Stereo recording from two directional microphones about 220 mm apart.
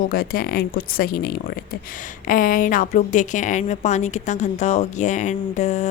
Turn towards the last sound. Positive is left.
turn(degrees=30)  # may be behind; listen again after turning